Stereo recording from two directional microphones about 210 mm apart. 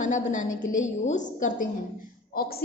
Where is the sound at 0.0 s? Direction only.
35° left (ahead or behind).